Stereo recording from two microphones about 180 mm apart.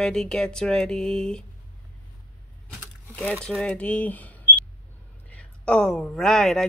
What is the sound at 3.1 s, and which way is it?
Speech, 5° left (ahead or behind).